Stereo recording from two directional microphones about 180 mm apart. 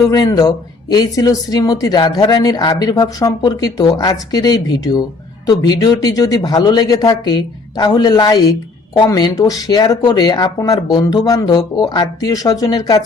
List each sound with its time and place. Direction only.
0.1 s speech: 20° left (ahead or behind)